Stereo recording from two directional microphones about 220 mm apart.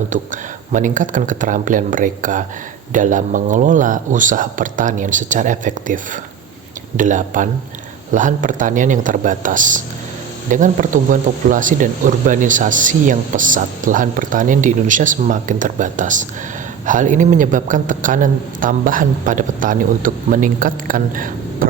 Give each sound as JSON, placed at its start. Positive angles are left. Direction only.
{"t": 0.1, "sound": "speech", "side_deg": -35}